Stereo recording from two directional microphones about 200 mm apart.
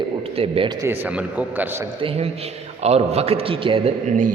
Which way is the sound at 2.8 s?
30° right (ahead or behind).